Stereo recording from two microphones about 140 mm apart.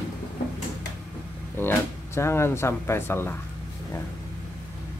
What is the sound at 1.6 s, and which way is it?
Speech, 15° left (ahead or behind).